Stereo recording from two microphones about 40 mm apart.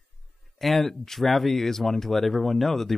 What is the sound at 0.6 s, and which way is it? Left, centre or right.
Speech, centre.